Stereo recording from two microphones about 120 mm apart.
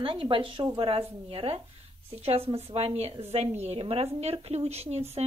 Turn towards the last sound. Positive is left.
turn(degrees=-60)  # may be behind; listen again after turning